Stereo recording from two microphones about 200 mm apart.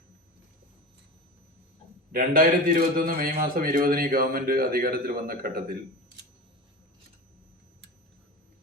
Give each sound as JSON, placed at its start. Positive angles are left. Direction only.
{"t": 2.1, "sound": "a man's voice", "side_deg": -45}